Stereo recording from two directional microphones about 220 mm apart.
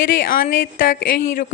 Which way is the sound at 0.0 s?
40° left (ahead or behind).